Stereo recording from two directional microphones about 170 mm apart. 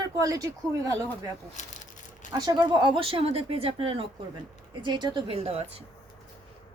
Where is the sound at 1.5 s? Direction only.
45° left (ahead or behind).